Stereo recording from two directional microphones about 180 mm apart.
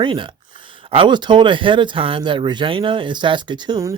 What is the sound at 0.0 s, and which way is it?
Speech, 25° right (ahead or behind).